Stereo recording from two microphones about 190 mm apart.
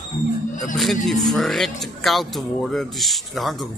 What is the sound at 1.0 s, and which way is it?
Speech, centre (ahead or behind).